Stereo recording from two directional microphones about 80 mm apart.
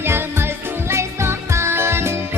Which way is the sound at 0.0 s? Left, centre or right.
Right.